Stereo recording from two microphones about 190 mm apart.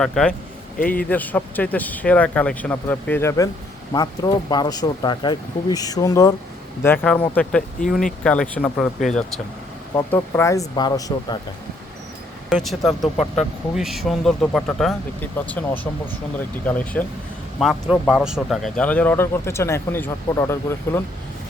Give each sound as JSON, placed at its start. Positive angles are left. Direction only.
{"t": 0.0, "sound": "speech", "side_deg": 5}
{"t": 9.9, "sound": "speech", "side_deg": 15}
{"t": 12.5, "sound": "speech", "side_deg": 0}
{"t": 13.7, "sound": "speech", "side_deg": 0}